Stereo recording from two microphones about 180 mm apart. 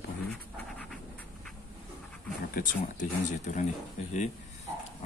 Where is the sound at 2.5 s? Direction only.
45° left (ahead or behind).